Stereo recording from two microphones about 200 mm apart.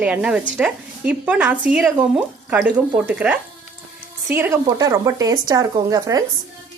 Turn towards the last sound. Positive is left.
turn(degrees=-15)  # may be behind; listen again after turning